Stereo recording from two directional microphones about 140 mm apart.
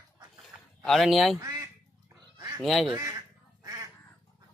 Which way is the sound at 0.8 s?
Centre (ahead or behind).